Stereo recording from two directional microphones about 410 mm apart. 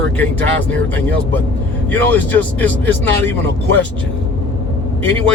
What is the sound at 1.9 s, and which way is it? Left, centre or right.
Speech, centre.